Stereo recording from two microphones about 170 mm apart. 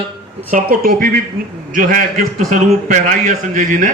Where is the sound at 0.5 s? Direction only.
55° right (ahead or behind).